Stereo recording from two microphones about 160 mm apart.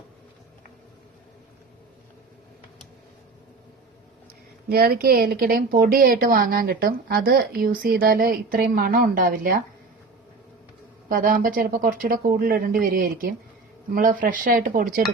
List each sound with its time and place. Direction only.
4.7 s a woman's voice: 70° right (ahead or behind)
11.1 s speech: 60° right (ahead or behind)